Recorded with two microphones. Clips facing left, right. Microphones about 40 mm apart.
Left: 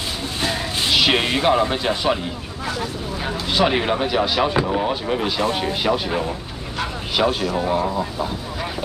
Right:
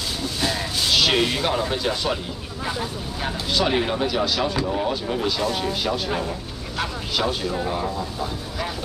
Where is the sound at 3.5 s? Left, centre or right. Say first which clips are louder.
Left 3 dB; left.